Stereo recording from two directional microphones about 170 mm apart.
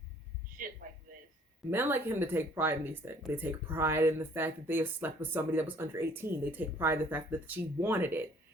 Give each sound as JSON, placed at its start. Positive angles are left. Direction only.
{"t": 0.5, "sound": "a man's voice", "side_deg": -55}
{"t": 1.7, "sound": "speech", "side_deg": -10}